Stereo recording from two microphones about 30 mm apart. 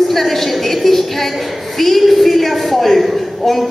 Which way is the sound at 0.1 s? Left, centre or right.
Centre.